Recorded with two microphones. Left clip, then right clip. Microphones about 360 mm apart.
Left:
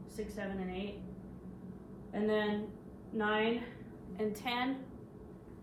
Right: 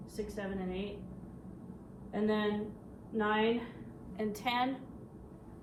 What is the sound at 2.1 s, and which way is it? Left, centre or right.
Speech, right.